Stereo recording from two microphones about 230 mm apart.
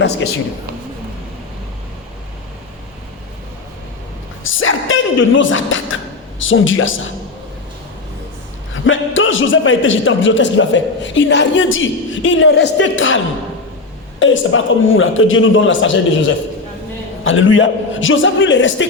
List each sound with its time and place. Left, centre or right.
4.4 s a sound: left
6.4 s a man's voice: left
8.7 s a man's voice: left